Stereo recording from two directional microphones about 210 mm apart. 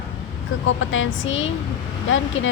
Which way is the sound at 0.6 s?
65° left (ahead or behind).